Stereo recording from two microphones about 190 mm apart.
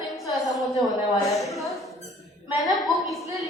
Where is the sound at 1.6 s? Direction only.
Centre (ahead or behind).